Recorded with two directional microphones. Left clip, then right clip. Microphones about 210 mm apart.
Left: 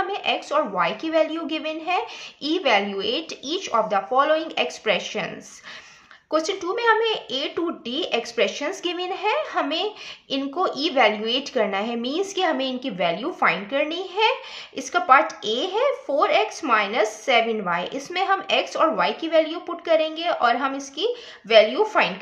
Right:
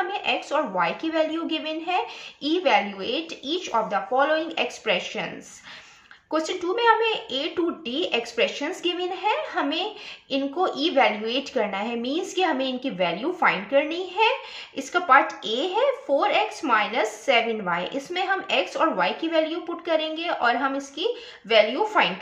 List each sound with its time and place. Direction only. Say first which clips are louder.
0.1 s a woman's voice: left 2 dB; 40° left (ahead or behind)
6.3 s a woman's voice: left 2 dB; 40° left (ahead or behind)